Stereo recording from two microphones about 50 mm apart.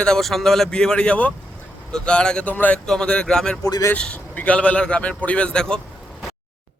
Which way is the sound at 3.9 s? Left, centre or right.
Left.